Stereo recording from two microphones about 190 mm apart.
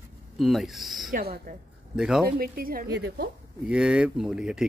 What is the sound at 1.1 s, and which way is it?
Speech, 50° right (ahead or behind).